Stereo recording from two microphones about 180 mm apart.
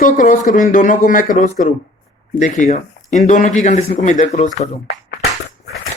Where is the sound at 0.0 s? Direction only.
50° left (ahead or behind).